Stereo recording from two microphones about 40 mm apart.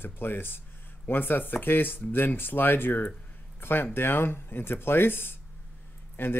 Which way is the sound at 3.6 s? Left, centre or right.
Left.